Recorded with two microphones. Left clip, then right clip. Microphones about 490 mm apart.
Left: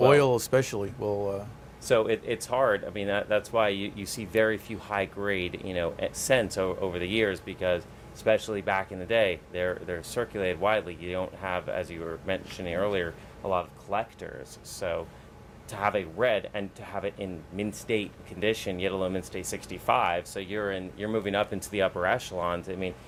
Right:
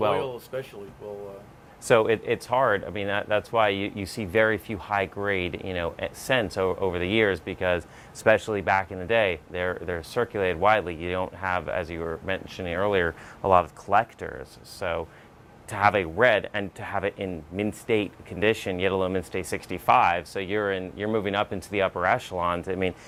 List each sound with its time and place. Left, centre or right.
0.1 s speech: left
1.9 s speech: right